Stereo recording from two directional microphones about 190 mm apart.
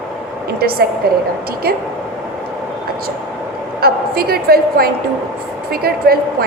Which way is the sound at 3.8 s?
55° right (ahead or behind).